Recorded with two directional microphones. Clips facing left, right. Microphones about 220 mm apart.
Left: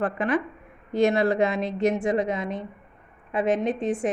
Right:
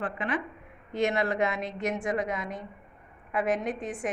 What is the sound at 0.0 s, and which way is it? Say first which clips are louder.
A woman's voice: left 7 dB; 40° left (ahead or behind).